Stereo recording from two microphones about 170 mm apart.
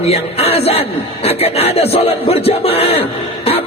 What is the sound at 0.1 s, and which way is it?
A man's voice, 35° left (ahead or behind).